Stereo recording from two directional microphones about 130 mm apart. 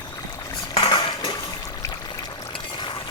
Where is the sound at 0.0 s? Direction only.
30° left (ahead or behind).